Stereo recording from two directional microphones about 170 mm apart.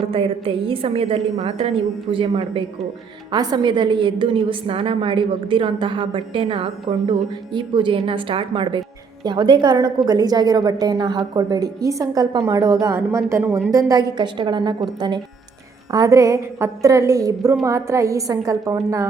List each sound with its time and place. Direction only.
0.0 s a woman's voice: 35° right (ahead or behind)